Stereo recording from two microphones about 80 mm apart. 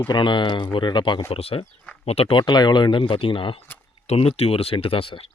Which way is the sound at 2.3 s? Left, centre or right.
Left.